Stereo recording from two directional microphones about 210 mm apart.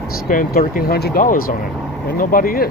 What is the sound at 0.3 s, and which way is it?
Speech, 40° left (ahead or behind).